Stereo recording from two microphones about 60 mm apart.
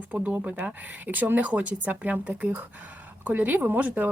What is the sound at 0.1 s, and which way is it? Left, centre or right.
Speech, right.